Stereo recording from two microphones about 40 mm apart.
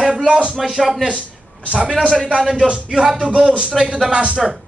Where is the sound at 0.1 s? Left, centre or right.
Right.